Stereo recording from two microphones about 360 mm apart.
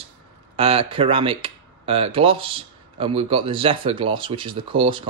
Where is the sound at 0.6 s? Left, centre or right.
Centre.